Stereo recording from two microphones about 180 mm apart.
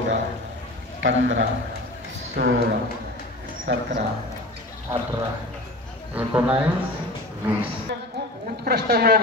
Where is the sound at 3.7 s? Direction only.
90° right.